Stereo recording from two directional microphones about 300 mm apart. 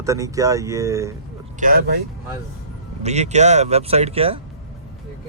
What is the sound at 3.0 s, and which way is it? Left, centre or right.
Speech, right.